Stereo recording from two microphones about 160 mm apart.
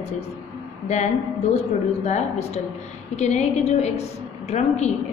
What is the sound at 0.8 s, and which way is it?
A woman's voice, 45° left (ahead or behind).